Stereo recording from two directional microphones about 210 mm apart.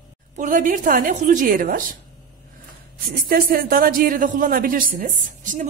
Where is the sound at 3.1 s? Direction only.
45° right (ahead or behind).